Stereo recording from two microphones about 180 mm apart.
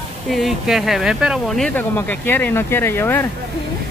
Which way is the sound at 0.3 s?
Centre (ahead or behind).